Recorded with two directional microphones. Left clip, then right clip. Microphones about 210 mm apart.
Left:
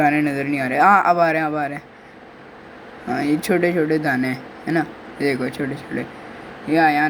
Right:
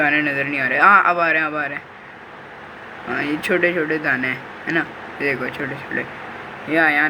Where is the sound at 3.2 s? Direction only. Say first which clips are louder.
Even; 40° left (ahead or behind).